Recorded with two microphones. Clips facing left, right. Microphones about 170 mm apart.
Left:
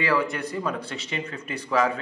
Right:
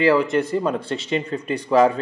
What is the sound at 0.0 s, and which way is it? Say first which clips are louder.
A man's voice: right 8 dB; 25° right (ahead or behind).